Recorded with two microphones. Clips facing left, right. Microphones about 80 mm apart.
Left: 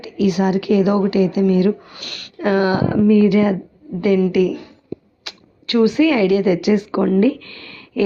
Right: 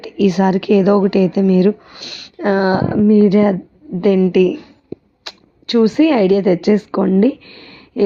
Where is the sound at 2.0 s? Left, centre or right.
Centre.